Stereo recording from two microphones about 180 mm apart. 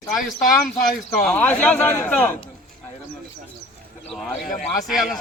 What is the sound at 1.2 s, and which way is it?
Speech, 5° left (ahead or behind).